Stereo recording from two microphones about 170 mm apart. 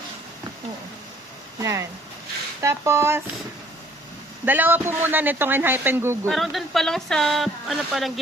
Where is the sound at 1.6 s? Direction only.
15° right (ahead or behind).